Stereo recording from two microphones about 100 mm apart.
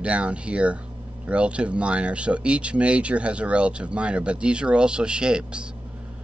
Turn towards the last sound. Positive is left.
turn(degrees=-10)  # may be behind; listen again after turning